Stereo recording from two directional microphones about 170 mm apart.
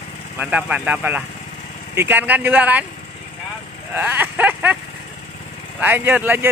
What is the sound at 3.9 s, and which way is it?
Speech, 10° right (ahead or behind).